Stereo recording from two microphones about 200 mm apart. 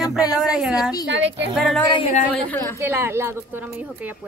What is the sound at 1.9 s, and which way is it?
Speech, 30° left (ahead or behind).